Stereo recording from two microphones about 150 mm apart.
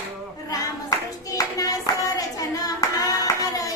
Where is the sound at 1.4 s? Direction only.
25° left (ahead or behind).